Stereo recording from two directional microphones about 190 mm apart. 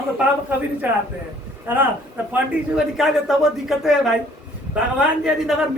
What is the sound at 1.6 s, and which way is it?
A man's voice, 10° right (ahead or behind).